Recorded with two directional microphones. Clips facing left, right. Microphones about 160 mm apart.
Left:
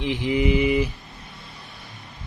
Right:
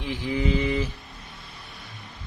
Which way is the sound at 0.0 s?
20° left (ahead or behind).